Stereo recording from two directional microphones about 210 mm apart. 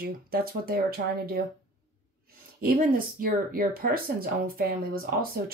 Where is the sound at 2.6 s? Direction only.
45° right (ahead or behind).